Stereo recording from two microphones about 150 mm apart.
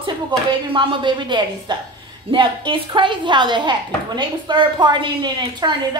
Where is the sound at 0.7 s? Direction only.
30° right (ahead or behind).